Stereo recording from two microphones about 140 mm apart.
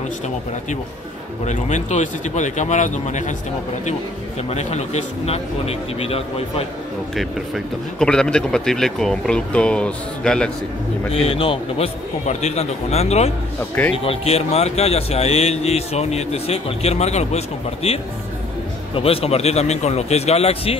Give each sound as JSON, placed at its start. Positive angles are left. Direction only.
{"t": 1.4, "sound": "speech", "side_deg": 55}
{"t": 4.5, "sound": "speech", "side_deg": 50}
{"t": 7.2, "sound": "speech", "side_deg": 5}
{"t": 11.1, "sound": "speech", "side_deg": 45}